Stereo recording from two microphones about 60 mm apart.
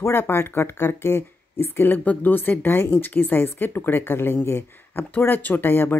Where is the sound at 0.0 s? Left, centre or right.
Left.